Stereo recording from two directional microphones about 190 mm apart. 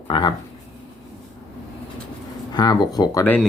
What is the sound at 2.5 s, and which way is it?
Speech, 20° left (ahead or behind).